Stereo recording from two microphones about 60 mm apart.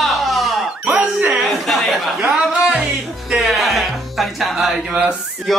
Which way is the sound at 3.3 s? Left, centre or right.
Centre.